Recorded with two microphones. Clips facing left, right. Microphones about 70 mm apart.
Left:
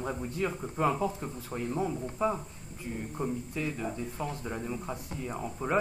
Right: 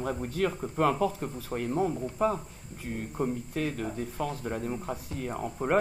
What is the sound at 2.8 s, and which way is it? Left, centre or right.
Speech, right.